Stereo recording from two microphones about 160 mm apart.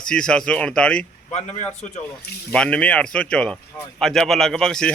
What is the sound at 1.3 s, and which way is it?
Speech, 45° left (ahead or behind).